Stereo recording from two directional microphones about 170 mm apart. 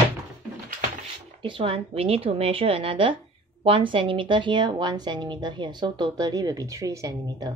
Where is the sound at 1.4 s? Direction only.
30° right (ahead or behind).